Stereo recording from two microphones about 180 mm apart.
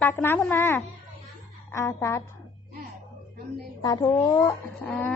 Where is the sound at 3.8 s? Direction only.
15° left (ahead or behind).